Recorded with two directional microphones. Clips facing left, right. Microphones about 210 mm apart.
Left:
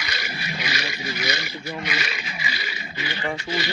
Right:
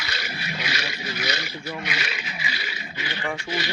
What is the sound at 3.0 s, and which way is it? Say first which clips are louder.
Speech: left 2 dB; 10° left (ahead or behind).